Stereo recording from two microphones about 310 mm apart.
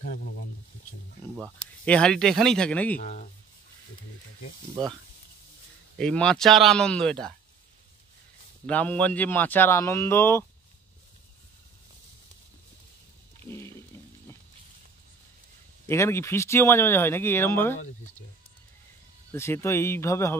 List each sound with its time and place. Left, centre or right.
0.0 s a sound: left
1.3 s speech: centre
3.0 s speech: left
5.9 s speech: centre
8.6 s speech: centre
13.5 s frying: centre
15.9 s speech: centre
19.3 s speech: centre